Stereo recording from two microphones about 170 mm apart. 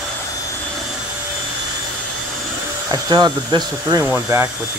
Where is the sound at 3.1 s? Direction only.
25° right (ahead or behind).